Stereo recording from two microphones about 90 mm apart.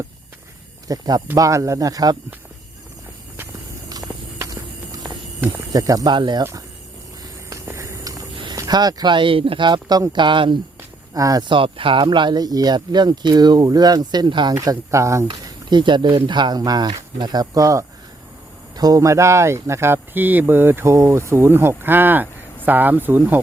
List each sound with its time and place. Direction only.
0.9 s speech: 45° right (ahead or behind)
1.4 s speech: 35° right (ahead or behind)
4.4 s walk: 40° right (ahead or behind)
5.7 s speech: 40° right (ahead or behind)
6.1 s speech: 55° right (ahead or behind)
7.5 s a sound: 35° right (ahead or behind)
8.5 s speech: 45° right (ahead or behind); by 9.6 s 85° right
9.6 s speech: 55° right (ahead or behind)
11.1 s speech: 45° right (ahead or behind)
11.4 s speech: 75° right (ahead or behind); by 14.5 s 55° right (ahead or behind)
14.5 s speech: 40° right (ahead or behind)
15.4 s speech: 60° right (ahead or behind); by 23.4 s 20° right (ahead or behind)